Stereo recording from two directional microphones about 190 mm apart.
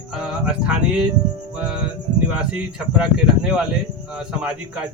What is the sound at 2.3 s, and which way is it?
Speech, 5° right (ahead or behind).